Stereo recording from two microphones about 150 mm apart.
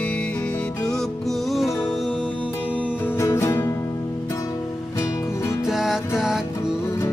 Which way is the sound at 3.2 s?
20° left (ahead or behind).